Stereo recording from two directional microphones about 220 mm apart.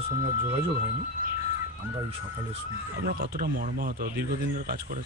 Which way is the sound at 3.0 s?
45° right (ahead or behind).